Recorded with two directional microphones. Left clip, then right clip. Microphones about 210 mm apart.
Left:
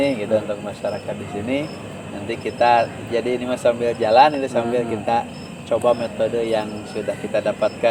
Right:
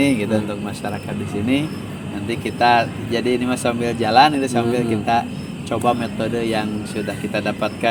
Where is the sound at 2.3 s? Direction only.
40° right (ahead or behind).